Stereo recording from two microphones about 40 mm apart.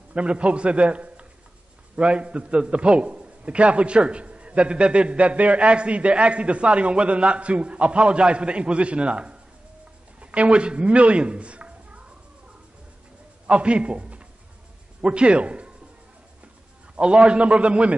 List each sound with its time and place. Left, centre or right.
0.1 s a man's voice: right
13.5 s a man's voice: right
16.9 s a man's voice: right